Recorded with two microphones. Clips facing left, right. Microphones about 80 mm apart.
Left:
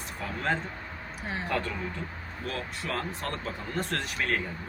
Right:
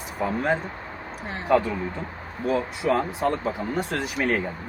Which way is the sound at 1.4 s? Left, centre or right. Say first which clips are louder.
Right 12 dB; centre.